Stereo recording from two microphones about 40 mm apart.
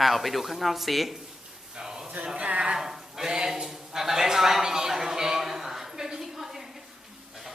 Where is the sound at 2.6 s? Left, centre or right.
Centre.